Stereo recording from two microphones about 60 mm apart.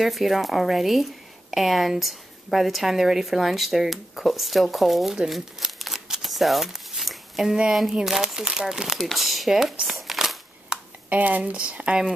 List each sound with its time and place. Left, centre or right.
0.0 s a woman's voice: centre
9.8 s a sound: centre
11.1 s speech: right